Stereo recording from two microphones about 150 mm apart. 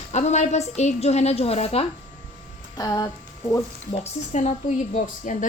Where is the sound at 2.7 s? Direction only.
25° left (ahead or behind).